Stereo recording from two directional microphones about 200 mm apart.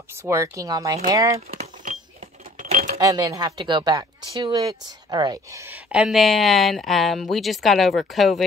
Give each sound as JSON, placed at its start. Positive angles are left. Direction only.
{"t": 0.2, "sound": "speech", "side_deg": -15}
{"t": 1.5, "sound": "a sound", "side_deg": -40}
{"t": 3.0, "sound": "speech", "side_deg": -15}